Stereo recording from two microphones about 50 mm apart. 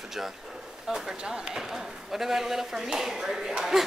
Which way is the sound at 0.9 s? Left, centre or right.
Centre.